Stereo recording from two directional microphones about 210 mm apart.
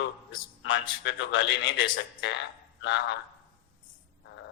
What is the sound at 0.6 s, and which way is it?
A man's voice, 60° left (ahead or behind).